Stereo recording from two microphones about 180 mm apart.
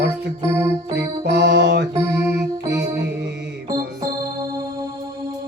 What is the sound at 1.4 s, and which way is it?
Music, 70° right (ahead or behind).